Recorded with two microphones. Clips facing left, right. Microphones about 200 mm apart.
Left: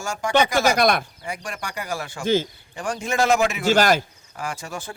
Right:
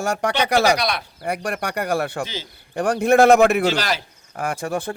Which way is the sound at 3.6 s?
50° left (ahead or behind).